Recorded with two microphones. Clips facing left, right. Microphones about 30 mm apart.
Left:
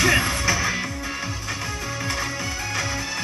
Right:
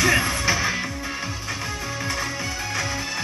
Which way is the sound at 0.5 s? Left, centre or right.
Centre.